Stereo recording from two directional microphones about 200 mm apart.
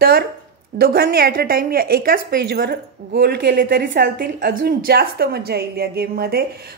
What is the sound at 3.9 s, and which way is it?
Speech, 45° right (ahead or behind).